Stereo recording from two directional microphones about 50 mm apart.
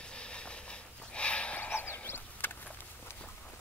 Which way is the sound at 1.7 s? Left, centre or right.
Left.